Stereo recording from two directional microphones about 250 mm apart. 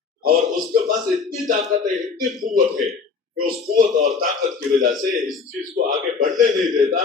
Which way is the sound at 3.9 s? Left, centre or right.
Right.